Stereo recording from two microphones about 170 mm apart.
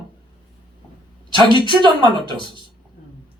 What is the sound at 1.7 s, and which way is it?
Speech, 30° right (ahead or behind).